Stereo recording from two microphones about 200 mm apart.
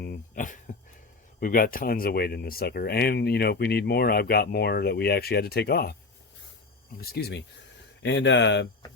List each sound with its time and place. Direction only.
0.0 s speech: 45° left (ahead or behind)
7.0 s speech: 50° left (ahead or behind)
8.0 s speech: 65° left (ahead or behind)